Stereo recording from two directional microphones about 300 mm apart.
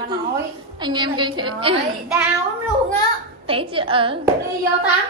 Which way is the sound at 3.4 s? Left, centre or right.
Centre.